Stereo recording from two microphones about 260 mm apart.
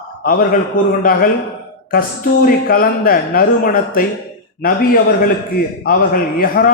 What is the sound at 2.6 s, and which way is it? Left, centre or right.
A man's voice, left.